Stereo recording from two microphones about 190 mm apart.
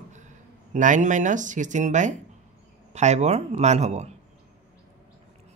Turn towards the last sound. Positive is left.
turn(degrees=-35)  # may be behind; listen again after turning